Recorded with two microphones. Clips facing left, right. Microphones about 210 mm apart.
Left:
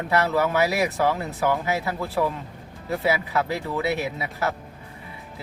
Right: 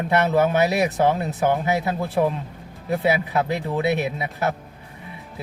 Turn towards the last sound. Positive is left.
turn(degrees=-20)  # may be behind; listen again after turning